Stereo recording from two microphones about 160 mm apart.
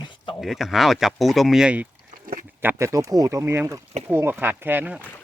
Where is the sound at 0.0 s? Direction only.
30° left (ahead or behind).